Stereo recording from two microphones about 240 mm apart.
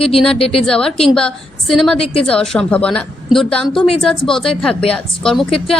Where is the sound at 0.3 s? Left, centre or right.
Left.